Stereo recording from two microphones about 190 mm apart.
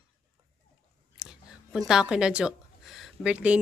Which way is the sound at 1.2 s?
Centre (ahead or behind).